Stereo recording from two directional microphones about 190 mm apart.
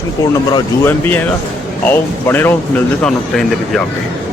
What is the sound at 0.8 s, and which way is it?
Speech, 10° left (ahead or behind).